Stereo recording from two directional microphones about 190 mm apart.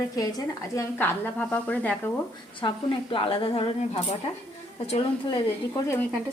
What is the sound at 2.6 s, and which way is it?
A woman's voice, 25° left (ahead or behind).